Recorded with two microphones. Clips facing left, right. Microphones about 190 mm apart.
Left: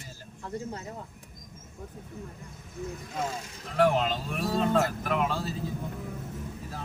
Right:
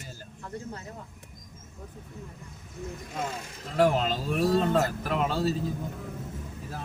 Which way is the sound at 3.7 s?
40° right (ahead or behind).